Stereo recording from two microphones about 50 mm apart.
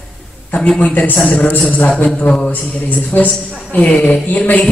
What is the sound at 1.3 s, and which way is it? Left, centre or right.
Speech, left.